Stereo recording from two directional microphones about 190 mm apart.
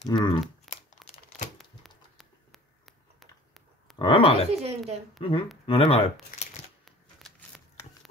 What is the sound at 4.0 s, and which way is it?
Speech, 25° left (ahead or behind).